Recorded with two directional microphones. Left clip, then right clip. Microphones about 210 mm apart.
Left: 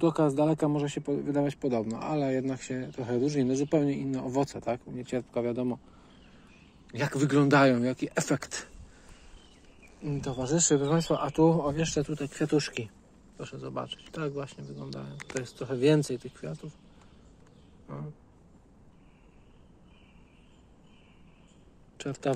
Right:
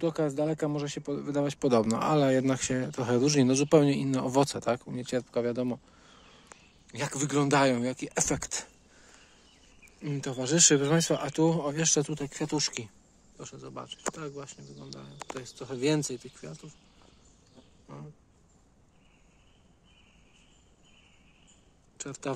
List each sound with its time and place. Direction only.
0.0 s speech: 10° right (ahead or behind)
1.7 s speech: 35° right (ahead or behind)
6.9 s speech: 5° right (ahead or behind)
10.0 s speech: 35° right (ahead or behind); by 12.9 s 15° right (ahead or behind)
13.4 s speech: 5° right (ahead or behind)
17.8 s a sound: 10° right (ahead or behind)
21.9 s speech: centre (ahead or behind)